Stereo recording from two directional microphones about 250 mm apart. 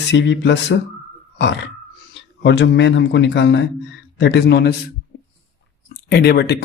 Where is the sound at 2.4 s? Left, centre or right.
Left.